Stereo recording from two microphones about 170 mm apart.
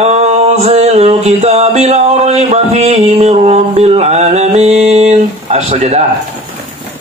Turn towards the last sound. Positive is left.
turn(degrees=-40)  # may be behind; listen again after turning